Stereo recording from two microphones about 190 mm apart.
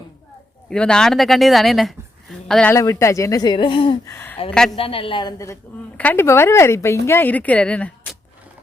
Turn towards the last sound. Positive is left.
turn(degrees=5)  # may be behind; listen again after turning